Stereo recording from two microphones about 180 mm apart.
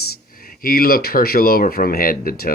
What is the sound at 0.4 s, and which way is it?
Speech, 55° left (ahead or behind).